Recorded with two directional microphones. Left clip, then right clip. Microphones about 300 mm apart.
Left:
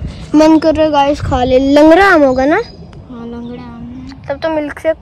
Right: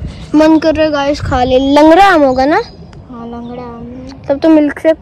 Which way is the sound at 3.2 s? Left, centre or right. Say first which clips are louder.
Right 2 dB; centre.